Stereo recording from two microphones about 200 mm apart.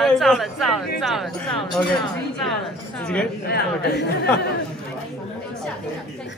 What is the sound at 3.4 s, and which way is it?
Speech, 55° left (ahead or behind).